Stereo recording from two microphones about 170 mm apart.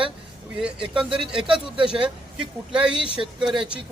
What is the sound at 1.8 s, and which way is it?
A man's voice, 5° right (ahead or behind).